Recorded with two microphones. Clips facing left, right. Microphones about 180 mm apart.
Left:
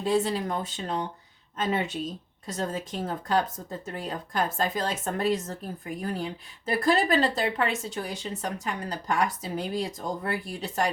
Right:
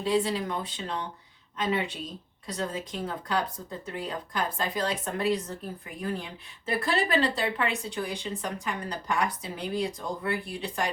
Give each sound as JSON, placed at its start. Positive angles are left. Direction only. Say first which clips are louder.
{"t": 0.0, "sound": "speech", "louder": "left 1 dB", "side_deg": 45}